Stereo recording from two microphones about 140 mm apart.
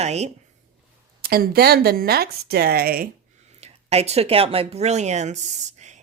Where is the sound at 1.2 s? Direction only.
90° right.